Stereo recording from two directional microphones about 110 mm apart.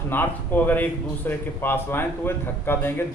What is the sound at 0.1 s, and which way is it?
A man's voice, 15° left (ahead or behind).